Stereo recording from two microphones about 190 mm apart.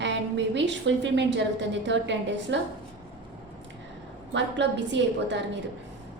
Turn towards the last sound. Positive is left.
turn(degrees=-70)  # may be behind; listen again after turning